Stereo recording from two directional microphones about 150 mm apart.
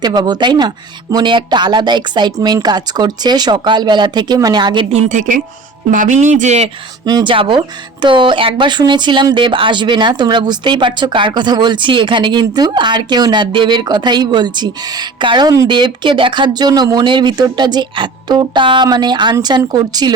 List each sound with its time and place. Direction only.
0.0 s speech: 30° right (ahead or behind)
4.9 s speech: 55° right (ahead or behind)
7.0 s speech: 30° right (ahead or behind)